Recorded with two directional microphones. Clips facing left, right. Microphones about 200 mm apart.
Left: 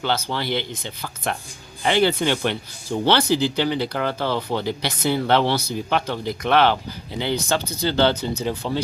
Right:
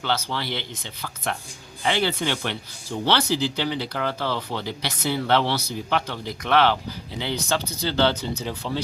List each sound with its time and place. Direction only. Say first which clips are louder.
0.0 s speech: left 3 dB; 50° left (ahead or behind)